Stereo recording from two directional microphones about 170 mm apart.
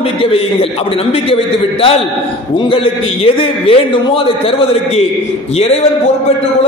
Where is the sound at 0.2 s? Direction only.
35° left (ahead or behind).